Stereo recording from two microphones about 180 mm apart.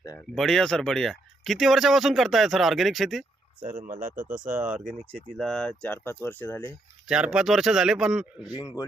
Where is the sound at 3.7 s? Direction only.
50° right (ahead or behind).